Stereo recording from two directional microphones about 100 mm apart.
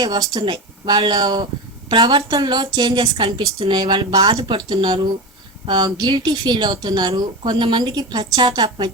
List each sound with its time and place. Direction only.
0.0 s speech: 40° right (ahead or behind)
3.0 s a woman's voice: 55° right (ahead or behind); by 4.4 s 40° right (ahead or behind)
4.4 s speech: 50° right (ahead or behind)